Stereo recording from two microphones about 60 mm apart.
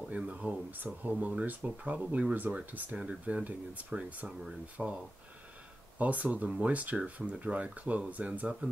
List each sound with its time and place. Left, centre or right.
0.1 s speech: right
3.0 s speech: centre